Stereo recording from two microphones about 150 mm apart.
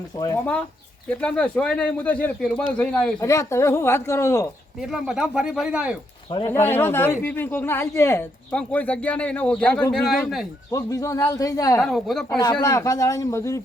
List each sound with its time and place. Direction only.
1.2 s speech: 5° left (ahead or behind)
3.2 s speech: 20° left (ahead or behind)
4.8 s speech: 5° right (ahead or behind)
6.5 s speech: 15° left (ahead or behind)
10.7 s speech: 20° left (ahead or behind)
11.8 s speech: centre (ahead or behind)
12.4 s speech: 25° left (ahead or behind)